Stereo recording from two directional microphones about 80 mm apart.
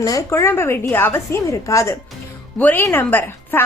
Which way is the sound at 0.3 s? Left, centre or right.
Left.